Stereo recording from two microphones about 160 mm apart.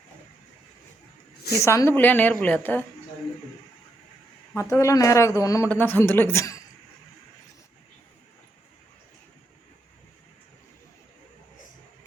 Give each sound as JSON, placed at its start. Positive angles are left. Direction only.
{"t": 1.6, "sound": "a woman's voice", "side_deg": 15}
{"t": 4.5, "sound": "a man's voice", "side_deg": 20}